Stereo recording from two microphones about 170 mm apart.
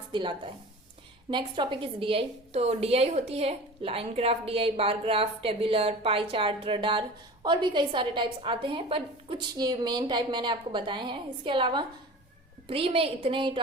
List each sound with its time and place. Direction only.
0.1 s a woman's voice: 30° right (ahead or behind)